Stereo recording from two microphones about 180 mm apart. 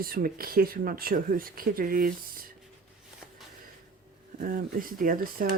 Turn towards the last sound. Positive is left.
turn(degrees=-50)  # may be behind; listen again after turning